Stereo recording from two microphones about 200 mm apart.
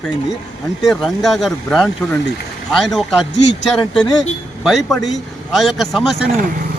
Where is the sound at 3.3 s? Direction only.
60° left (ahead or behind).